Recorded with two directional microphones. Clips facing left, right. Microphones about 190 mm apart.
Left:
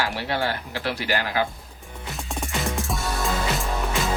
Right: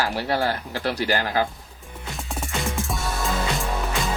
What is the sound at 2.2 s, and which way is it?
Music, centre (ahead or behind).